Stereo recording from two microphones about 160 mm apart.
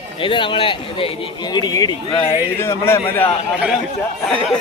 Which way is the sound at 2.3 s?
15° left (ahead or behind).